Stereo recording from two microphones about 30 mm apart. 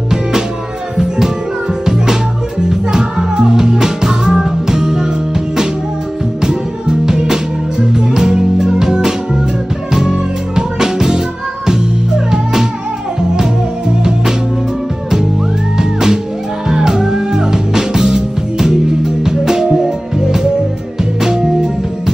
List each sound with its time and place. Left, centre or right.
2.7 s music: right
6.4 s music: right
15.8 s music: right